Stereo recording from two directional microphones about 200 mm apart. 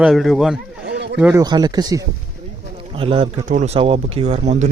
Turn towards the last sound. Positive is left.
turn(degrees=-35)  # may be behind; listen again after turning